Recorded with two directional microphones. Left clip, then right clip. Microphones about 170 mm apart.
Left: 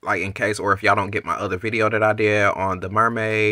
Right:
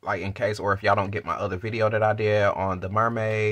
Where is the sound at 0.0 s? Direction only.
20° left (ahead or behind).